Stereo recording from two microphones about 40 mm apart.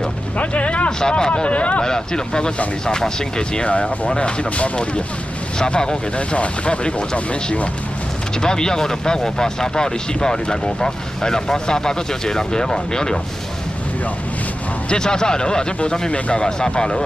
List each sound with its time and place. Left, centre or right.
0.4 s speech: left
0.8 s speech: left
1.8 s speech: centre
3.7 s speech: left; by 13.2 s centre
14.9 s speech: centre
16.1 s speech: left
16.4 s speech: centre